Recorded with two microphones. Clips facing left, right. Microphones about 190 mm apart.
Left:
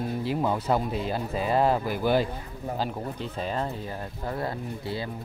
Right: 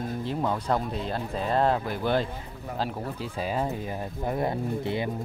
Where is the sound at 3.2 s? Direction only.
5° right (ahead or behind).